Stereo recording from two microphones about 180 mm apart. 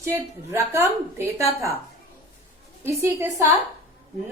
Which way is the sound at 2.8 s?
15° right (ahead or behind).